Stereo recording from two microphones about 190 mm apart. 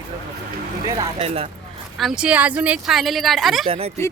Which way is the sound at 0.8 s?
20° right (ahead or behind).